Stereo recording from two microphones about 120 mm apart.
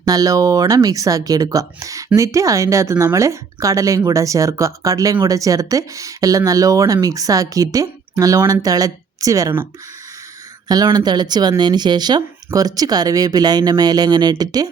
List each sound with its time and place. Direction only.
0.0 s a woman's voice: 30° right (ahead or behind)
10.9 s speech: 35° right (ahead or behind)